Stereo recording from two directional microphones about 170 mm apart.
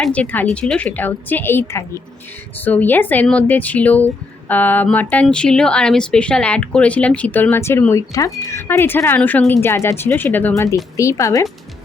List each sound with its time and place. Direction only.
0.0 s speech: 5° left (ahead or behind)